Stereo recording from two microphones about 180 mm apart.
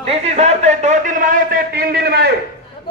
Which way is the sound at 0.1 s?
35° right (ahead or behind).